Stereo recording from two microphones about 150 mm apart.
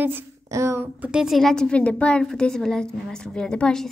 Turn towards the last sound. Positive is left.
turn(degrees=5)  # may be behind; listen again after turning